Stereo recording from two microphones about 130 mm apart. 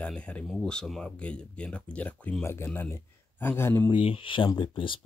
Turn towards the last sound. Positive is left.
turn(degrees=40)  # may be behind; listen again after turning